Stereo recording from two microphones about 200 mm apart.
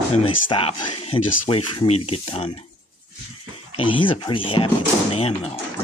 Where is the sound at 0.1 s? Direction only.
30° left (ahead or behind).